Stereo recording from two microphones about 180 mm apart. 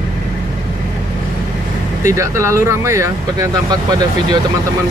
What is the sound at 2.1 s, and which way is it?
Speech, 15° right (ahead or behind).